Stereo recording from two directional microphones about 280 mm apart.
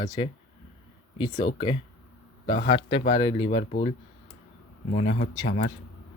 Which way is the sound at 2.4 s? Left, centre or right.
Centre.